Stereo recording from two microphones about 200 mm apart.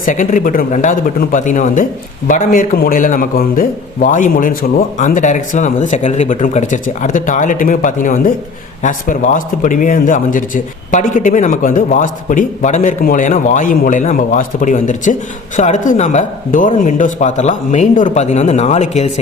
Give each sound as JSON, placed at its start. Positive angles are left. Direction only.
{"t": 0.0, "sound": "a man's voice", "side_deg": 40}